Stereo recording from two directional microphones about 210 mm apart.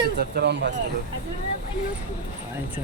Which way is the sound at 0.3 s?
55° right (ahead or behind).